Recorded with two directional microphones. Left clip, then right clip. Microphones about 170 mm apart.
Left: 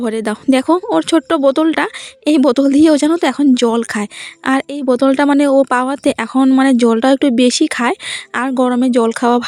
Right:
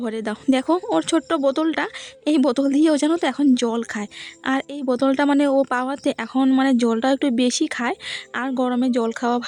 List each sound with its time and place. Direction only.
0.0 s speech: 30° left (ahead or behind)